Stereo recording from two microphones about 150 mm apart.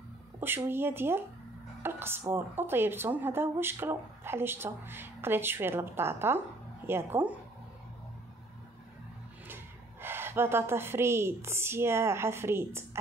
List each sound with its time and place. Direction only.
0.4 s speech: 15° right (ahead or behind)
10.0 s speech: 15° right (ahead or behind)